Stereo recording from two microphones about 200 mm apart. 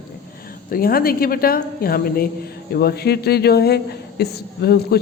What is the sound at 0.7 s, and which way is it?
A man's voice, 45° left (ahead or behind).